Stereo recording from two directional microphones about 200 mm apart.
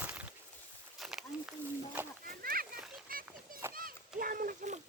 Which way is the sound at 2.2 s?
50° right (ahead or behind).